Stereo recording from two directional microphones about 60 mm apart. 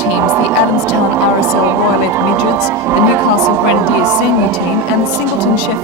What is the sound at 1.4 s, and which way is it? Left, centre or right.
A woman's voice, right.